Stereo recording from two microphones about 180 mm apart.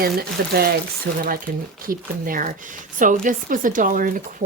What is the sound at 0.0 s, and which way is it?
Speech, 55° right (ahead or behind).